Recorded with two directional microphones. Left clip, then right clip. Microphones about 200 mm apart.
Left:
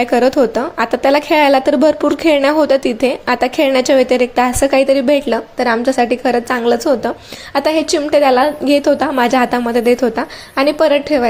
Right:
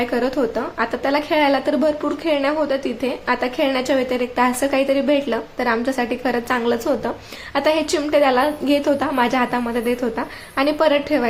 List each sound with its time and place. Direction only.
0.0 s a woman's voice: 30° left (ahead or behind)